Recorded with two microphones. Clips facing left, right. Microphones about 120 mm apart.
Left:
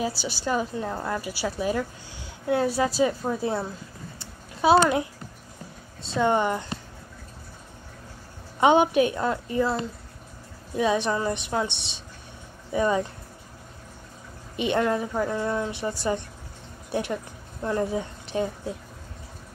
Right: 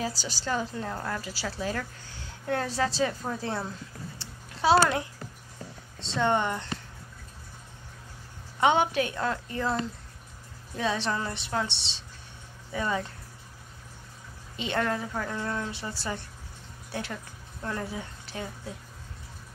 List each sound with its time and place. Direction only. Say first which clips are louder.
0.0 s a woman's voice: left 4 dB; 15° left (ahead or behind)
6.0 s a woman's voice: left 3 dB; 10° left (ahead or behind)
8.5 s a woman's voice: left 5 dB; 15° left (ahead or behind)
14.6 s a woman's voice: left 5 dB; 15° left (ahead or behind)